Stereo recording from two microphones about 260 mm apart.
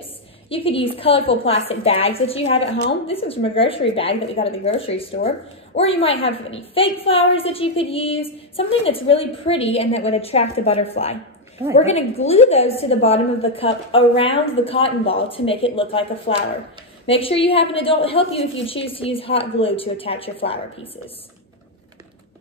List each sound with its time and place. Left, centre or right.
0.5 s a woman's voice: left